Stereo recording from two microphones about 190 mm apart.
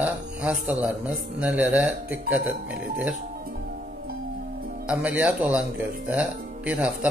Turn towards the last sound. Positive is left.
turn(degrees=-5)  # may be behind; listen again after turning